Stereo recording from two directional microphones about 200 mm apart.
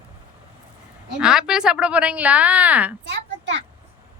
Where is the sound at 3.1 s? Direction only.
60° right (ahead or behind).